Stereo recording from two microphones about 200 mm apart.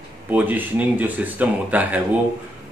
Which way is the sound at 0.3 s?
10° right (ahead or behind).